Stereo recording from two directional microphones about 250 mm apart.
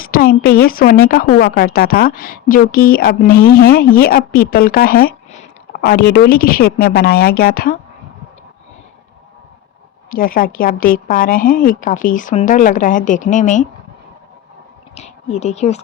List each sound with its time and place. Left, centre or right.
0.0 s a woman's voice: left
10.1 s a woman's voice: left
14.9 s speech: left